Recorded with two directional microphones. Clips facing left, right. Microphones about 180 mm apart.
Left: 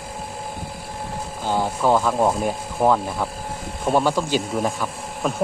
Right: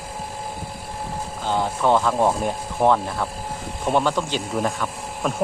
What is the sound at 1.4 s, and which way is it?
Speech, 10° left (ahead or behind).